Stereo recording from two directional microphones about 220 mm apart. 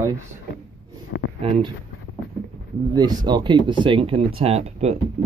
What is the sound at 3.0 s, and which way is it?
Speech, 20° right (ahead or behind).